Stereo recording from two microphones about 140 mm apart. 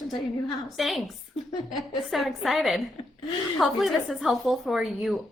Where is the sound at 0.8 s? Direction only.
Centre (ahead or behind).